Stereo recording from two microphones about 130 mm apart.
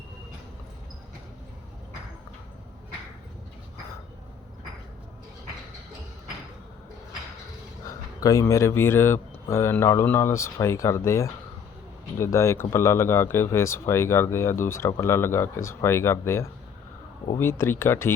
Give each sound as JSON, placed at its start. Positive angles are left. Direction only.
{"t": 7.9, "sound": "speech", "side_deg": 25}